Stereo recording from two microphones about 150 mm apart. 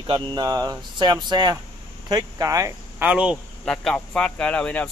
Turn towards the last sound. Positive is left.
turn(degrees=10)  # may be behind; listen again after turning